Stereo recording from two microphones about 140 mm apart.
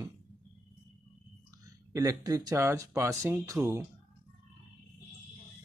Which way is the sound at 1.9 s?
25° right (ahead or behind).